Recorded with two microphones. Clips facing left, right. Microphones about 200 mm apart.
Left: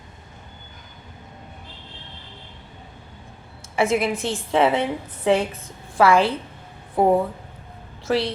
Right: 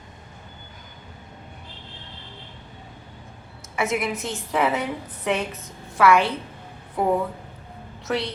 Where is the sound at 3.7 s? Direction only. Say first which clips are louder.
Left 4 dB; 30° left (ahead or behind).